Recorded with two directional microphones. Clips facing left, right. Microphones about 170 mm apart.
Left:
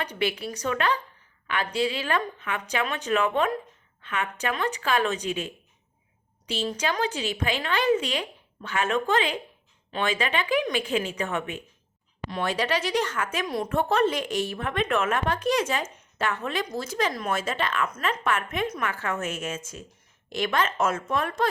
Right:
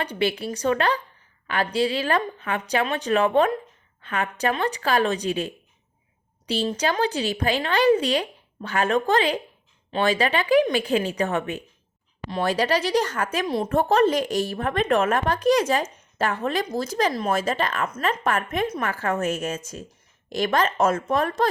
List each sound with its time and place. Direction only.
0.0 s a woman's voice: 30° right (ahead or behind)
6.5 s speech: 35° right (ahead or behind)